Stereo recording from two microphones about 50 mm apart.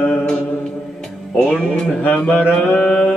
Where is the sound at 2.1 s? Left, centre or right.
Centre.